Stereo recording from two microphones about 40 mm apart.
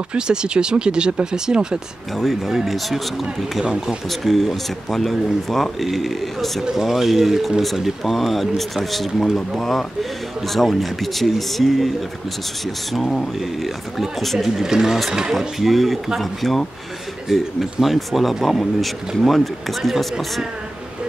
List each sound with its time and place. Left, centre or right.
0.1 s speech: right
2.4 s speech: centre
6.7 s speech: centre
12.9 s speech: centre
14.6 s speech: centre
15.3 s speech: centre